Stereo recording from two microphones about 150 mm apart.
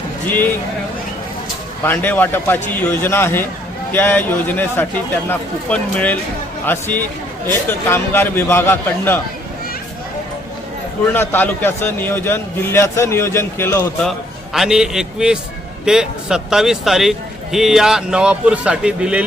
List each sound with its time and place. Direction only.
1.8 s a man's voice: 15° left (ahead or behind)
11.1 s a man's voice: 15° left (ahead or behind)
14.5 s speech: 5° right (ahead or behind)